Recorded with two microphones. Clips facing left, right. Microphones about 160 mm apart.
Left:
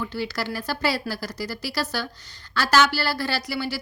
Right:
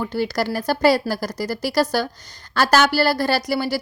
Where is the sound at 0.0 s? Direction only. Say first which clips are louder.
Right 6 dB; 45° right (ahead or behind).